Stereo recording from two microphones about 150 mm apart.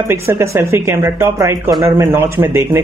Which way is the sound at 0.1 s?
15° right (ahead or behind).